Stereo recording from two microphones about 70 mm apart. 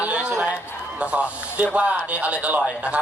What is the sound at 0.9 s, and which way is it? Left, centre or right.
Speech, centre.